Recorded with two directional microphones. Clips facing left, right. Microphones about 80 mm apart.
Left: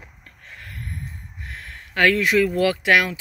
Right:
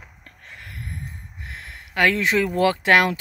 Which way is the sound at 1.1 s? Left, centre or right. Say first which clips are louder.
Left 1 dB; right.